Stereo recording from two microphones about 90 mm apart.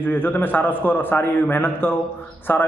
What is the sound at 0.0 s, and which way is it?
A man's voice, 25° left (ahead or behind).